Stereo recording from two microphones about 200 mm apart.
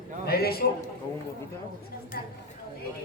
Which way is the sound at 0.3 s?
50° left (ahead or behind).